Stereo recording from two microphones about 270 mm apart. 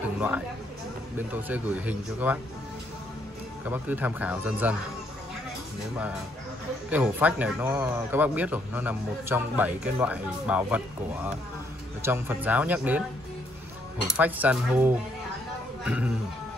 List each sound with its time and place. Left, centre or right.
1.1 s speech: centre
3.6 s speech: centre
6.9 s speech: centre
12.0 s speech: centre
14.0 s speech: centre
15.8 s music: centre